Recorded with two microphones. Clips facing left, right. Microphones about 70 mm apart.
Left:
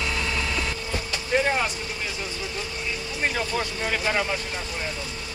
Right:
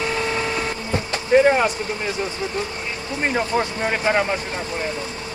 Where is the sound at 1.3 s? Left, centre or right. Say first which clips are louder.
Right 9 dB; right.